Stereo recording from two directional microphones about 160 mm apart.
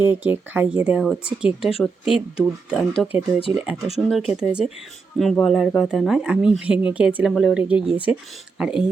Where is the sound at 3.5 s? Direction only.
10° right (ahead or behind).